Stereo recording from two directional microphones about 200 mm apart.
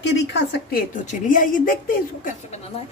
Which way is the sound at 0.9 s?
40° left (ahead or behind).